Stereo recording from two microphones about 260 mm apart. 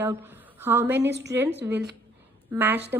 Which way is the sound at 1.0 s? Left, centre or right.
Right.